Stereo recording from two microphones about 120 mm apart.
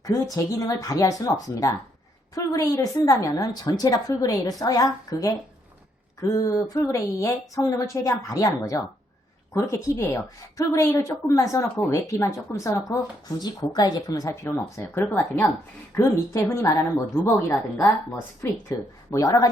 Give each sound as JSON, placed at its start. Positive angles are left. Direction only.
{"t": 0.0, "sound": "a woman's voice", "side_deg": 30}
{"t": 19.1, "sound": "a woman's voice", "side_deg": 30}